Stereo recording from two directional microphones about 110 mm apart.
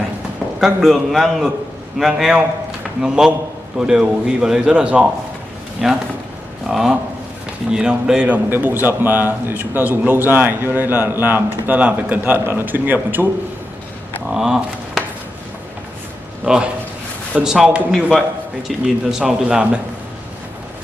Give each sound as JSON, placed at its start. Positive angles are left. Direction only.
{"t": 0.6, "sound": "a man's voice", "side_deg": 0}
{"t": 14.3, "sound": "a sound", "side_deg": -5}
{"t": 16.4, "sound": "a man's voice", "side_deg": -10}